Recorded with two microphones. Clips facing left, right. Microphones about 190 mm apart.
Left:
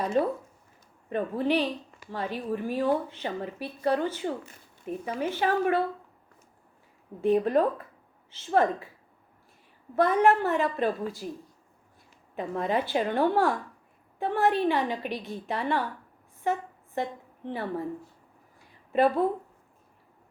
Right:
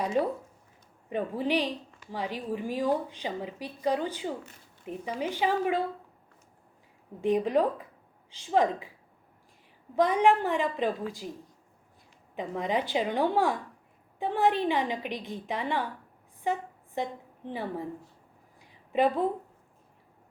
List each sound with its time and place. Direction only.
0.0 s speech: 10° right (ahead or behind)
7.2 s speech: 15° right (ahead or behind)
9.9 s speech: 15° right (ahead or behind)
12.4 s speech: 15° right (ahead or behind)
17.0 s a woman's voice: 15° right (ahead or behind)